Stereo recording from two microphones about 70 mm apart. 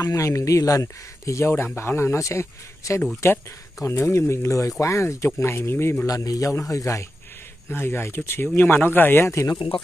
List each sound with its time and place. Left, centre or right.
0.0 s speech: left
6.0 s a man's voice: left
7.7 s speech: left